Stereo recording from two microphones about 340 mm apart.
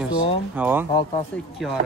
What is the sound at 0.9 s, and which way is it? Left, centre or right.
Speech, centre.